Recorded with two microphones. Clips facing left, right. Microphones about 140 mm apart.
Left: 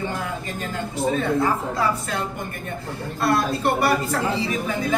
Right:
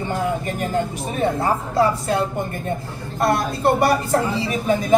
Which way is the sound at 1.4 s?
30° right (ahead or behind).